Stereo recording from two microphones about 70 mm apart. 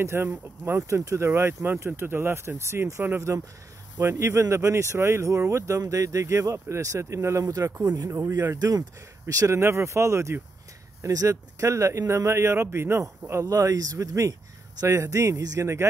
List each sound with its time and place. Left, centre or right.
0.0 s speech: right
0.8 s speech: right
8.1 s speech: right
8.5 s speech: right
9.3 s speech: right
9.6 s speech: right
13.0 s speech: right